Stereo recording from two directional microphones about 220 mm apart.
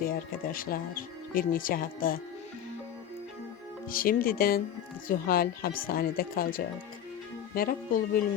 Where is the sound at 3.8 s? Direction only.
40° left (ahead or behind).